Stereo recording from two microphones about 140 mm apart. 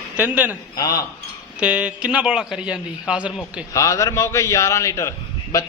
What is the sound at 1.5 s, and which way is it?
Speech, 10° right (ahead or behind).